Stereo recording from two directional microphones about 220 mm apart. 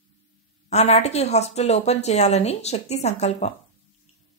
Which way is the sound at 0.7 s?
30° left (ahead or behind).